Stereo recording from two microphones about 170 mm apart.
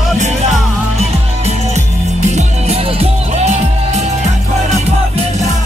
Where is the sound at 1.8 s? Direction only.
45° right (ahead or behind).